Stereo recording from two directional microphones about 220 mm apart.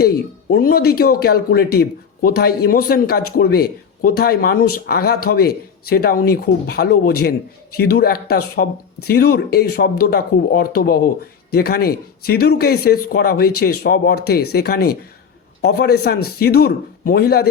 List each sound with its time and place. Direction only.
0.5 s speech: 45° left (ahead or behind)